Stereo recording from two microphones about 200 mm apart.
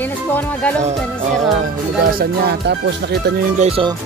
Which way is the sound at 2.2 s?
55° right (ahead or behind).